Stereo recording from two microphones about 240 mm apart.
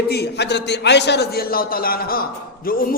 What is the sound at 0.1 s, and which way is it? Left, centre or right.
A man's voice, left.